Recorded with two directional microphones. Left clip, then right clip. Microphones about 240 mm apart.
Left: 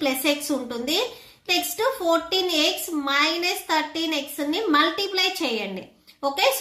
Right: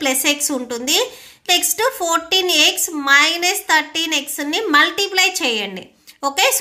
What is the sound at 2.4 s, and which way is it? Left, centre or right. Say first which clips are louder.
A woman's voice: right 7 dB; right.